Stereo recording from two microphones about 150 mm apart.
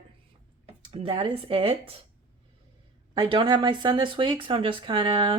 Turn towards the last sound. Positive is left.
turn(degrees=-35)  # may be behind; listen again after turning